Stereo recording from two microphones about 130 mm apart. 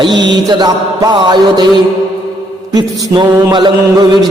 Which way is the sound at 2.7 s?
35° right (ahead or behind).